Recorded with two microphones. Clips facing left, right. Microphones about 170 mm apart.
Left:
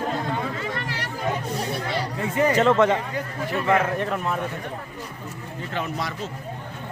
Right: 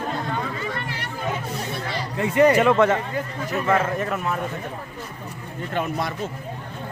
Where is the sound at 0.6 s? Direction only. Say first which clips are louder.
Even; 90° left.